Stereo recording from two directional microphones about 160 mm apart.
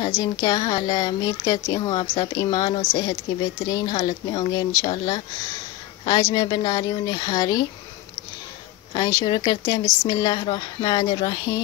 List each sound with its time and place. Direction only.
0.2 s speech: 25° left (ahead or behind)
8.9 s speech: 25° left (ahead or behind)